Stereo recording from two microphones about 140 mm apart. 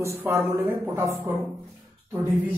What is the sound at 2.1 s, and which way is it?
Speech, 20° right (ahead or behind).